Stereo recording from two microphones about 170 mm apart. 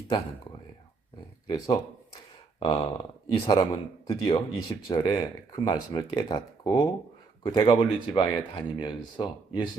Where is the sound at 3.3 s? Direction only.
25° left (ahead or behind).